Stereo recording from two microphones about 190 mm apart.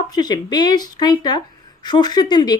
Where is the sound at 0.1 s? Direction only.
20° left (ahead or behind).